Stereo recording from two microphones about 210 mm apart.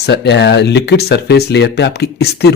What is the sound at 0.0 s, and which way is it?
A man's voice, 55° left (ahead or behind).